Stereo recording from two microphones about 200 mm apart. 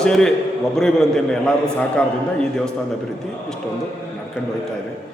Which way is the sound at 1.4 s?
5° left (ahead or behind).